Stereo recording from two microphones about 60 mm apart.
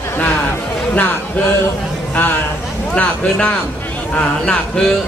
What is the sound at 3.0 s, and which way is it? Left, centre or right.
Speech, left.